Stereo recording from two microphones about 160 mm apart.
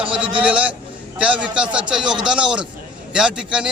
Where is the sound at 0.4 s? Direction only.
10° right (ahead or behind).